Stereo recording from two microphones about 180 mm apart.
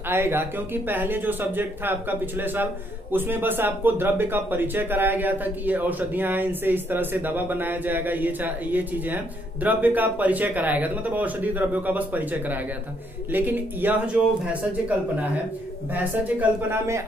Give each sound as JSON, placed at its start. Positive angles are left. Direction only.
{"t": 0.1, "sound": "speech", "side_deg": -10}